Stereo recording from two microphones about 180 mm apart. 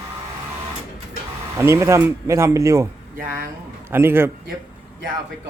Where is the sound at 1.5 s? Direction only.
15° right (ahead or behind).